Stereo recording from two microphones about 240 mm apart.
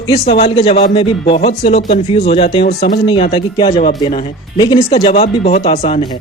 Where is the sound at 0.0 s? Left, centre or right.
Left.